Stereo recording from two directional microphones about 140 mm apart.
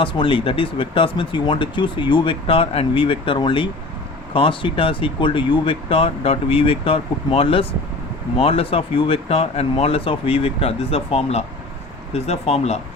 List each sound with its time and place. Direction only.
0.0 s speech: 35° left (ahead or behind)